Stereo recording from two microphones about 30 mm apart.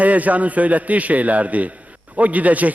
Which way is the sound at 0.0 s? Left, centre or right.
Right.